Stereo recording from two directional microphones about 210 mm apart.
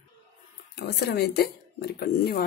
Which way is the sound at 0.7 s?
50° left (ahead or behind).